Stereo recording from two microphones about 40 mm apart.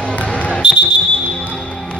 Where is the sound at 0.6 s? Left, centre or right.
Right.